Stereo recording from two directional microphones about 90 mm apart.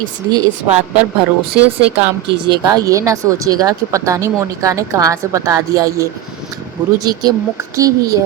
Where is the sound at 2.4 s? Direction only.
60° right (ahead or behind).